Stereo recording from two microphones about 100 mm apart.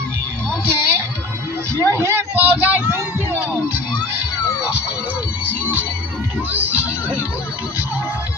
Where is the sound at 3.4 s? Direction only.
20° right (ahead or behind).